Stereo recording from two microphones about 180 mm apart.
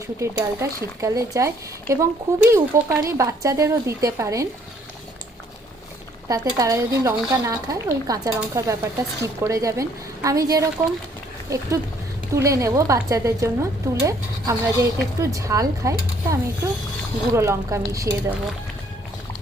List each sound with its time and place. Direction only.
0.2 s speech: 20° right (ahead or behind)
6.2 s a woman's voice: 20° right (ahead or behind)